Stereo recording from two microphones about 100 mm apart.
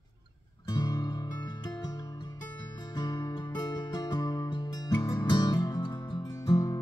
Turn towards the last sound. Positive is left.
turn(degrees=35)  # may be behind; listen again after turning